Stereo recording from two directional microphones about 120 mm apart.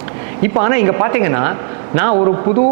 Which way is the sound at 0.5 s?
20° right (ahead or behind).